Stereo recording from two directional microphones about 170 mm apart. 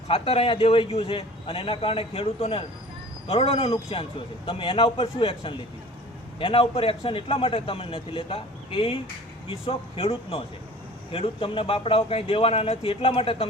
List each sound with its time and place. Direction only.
0.1 s a man's voice: 30° left (ahead or behind)